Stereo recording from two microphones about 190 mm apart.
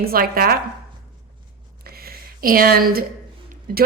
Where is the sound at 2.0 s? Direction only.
50° right (ahead or behind).